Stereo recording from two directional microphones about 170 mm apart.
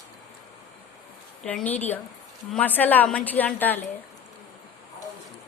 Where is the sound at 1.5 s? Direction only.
10° left (ahead or behind).